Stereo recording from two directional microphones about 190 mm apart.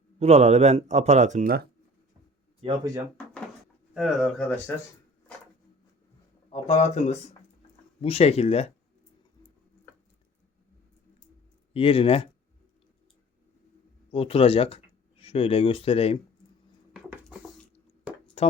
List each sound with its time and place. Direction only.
0.2 s speech: 35° right (ahead or behind)
2.6 s speech: 30° right (ahead or behind)
3.9 s speech: centre (ahead or behind)
6.5 s speech: 35° left (ahead or behind)
11.7 s speech: 30° left (ahead or behind)
14.1 s speech: 30° left (ahead or behind)
18.4 s music: 30° left (ahead or behind)